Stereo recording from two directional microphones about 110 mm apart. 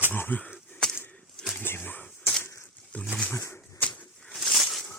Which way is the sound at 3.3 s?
20° left (ahead or behind).